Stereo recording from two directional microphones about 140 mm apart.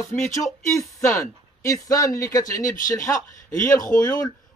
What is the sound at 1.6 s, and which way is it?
A man's voice, 25° left (ahead or behind).